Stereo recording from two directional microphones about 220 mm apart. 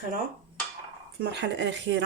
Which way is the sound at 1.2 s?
50° right (ahead or behind).